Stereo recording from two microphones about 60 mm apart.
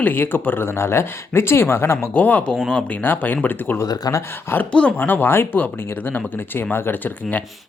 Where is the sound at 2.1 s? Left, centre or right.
Left.